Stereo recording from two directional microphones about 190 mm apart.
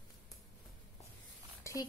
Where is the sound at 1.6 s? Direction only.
15° left (ahead or behind).